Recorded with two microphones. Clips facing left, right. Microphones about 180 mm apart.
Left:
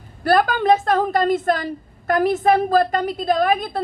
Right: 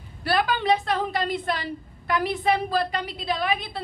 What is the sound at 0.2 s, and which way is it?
A woman's voice, 45° left (ahead or behind).